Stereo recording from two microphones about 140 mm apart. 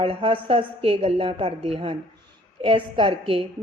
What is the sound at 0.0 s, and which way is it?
A woman's voice, 40° right (ahead or behind).